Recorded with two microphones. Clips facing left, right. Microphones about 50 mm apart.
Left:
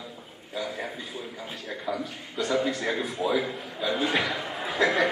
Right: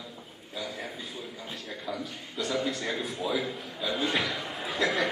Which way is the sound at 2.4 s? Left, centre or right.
Centre.